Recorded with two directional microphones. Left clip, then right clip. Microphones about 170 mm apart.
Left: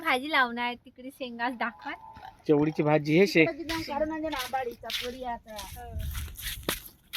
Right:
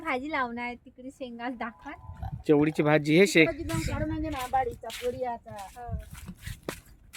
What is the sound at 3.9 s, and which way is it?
Speech, 30° right (ahead or behind).